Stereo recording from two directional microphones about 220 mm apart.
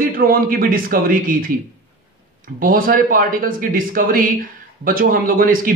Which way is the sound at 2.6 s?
40° right (ahead or behind).